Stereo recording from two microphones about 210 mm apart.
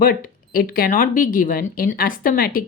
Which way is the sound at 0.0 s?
40° left (ahead or behind).